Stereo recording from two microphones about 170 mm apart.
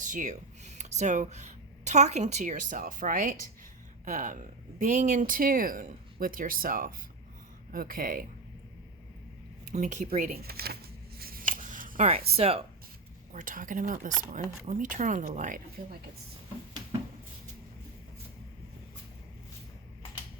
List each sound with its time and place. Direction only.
0.0 s speech: 50° right (ahead or behind)
9.7 s speech: 45° right (ahead or behind)
10.2 s speech: 60° right (ahead or behind)
11.2 s scissors: 60° right (ahead or behind)
12.3 s speech: 35° right (ahead or behind)
13.3 s speech: 50° right (ahead or behind)